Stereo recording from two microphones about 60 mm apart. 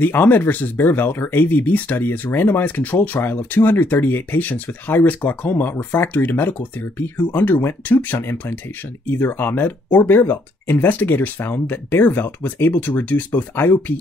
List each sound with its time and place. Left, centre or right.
0.0 s speech: left